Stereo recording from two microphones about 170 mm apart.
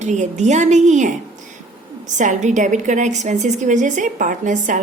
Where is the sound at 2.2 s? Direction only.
45° right (ahead or behind).